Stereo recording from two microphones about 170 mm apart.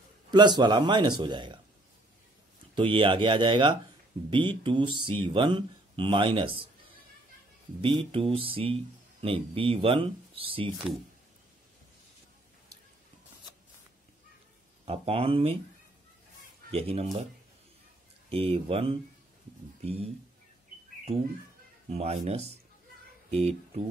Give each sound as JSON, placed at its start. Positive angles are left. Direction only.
{"t": 0.3, "sound": "speech", "side_deg": -25}
{"t": 2.7, "sound": "speech", "side_deg": -30}
{"t": 7.8, "sound": "speech", "side_deg": -30}
{"t": 14.9, "sound": "speech", "side_deg": -35}
{"t": 16.7, "sound": "speech", "side_deg": -35}
{"t": 18.3, "sound": "speech", "side_deg": -35}
{"t": 21.9, "sound": "speech", "side_deg": -40}